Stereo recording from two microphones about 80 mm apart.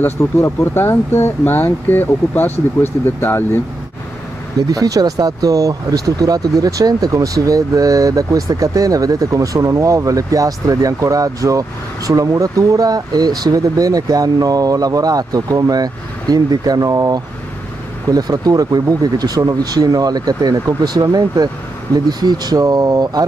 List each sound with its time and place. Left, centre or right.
0.0 s speech: left
4.6 s speech: right